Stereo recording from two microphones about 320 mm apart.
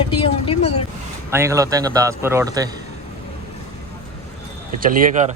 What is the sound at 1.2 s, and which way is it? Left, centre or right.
A man's voice, centre.